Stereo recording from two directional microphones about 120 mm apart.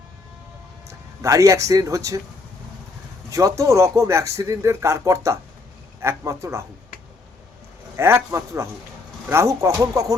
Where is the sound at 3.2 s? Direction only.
25° right (ahead or behind).